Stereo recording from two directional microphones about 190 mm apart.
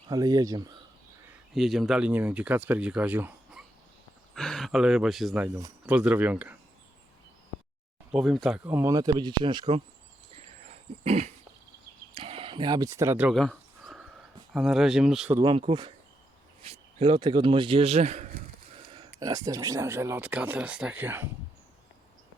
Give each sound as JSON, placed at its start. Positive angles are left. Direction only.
{"t": 0.1, "sound": "speech", "side_deg": -20}
{"t": 1.5, "sound": "speech", "side_deg": 0}
{"t": 4.4, "sound": "speech", "side_deg": 0}
{"t": 8.1, "sound": "speech", "side_deg": 0}
{"t": 11.0, "sound": "a sound", "side_deg": -35}
{"t": 14.5, "sound": "speech", "side_deg": 0}
{"t": 15.4, "sound": "speech", "side_deg": -25}
{"t": 18.9, "sound": "speech", "side_deg": -20}